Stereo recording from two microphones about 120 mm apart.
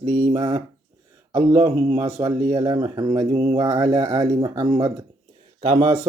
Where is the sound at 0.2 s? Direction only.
35° right (ahead or behind).